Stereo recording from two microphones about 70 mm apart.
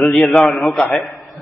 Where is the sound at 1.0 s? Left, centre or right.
Centre.